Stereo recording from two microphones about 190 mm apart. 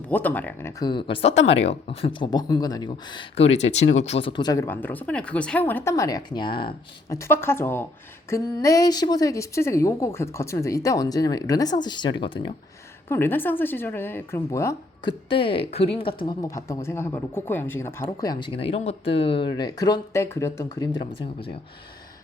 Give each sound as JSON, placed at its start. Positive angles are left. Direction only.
{"t": 0.1, "sound": "speech", "side_deg": 10}
{"t": 7.2, "sound": "speech", "side_deg": 10}
{"t": 13.1, "sound": "speech", "side_deg": 10}
{"t": 15.3, "sound": "speech", "side_deg": 30}